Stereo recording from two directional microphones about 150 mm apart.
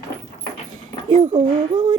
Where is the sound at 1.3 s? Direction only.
30° right (ahead or behind).